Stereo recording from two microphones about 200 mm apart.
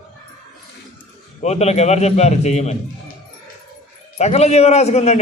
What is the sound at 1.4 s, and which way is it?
A man's voice, 35° left (ahead or behind).